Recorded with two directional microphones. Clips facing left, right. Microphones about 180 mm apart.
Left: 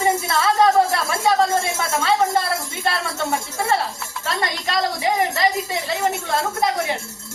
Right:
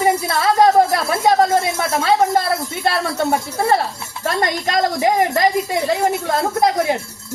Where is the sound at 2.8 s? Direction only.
40° right (ahead or behind).